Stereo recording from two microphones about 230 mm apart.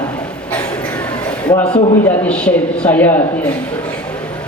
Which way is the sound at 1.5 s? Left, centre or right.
Centre.